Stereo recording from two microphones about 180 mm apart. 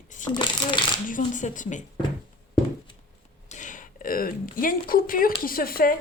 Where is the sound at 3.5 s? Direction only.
45° left (ahead or behind).